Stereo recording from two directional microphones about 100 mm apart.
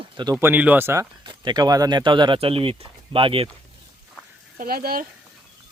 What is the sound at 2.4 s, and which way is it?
Speech, 70° right (ahead or behind).